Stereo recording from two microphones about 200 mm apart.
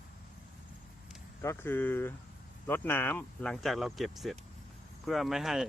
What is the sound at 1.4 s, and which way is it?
Speech, 15° left (ahead or behind).